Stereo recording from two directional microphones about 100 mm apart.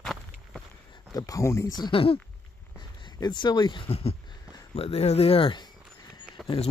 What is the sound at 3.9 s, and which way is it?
Speech, 90° left.